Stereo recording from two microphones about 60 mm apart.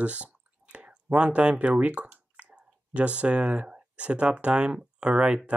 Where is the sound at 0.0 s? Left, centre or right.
Right.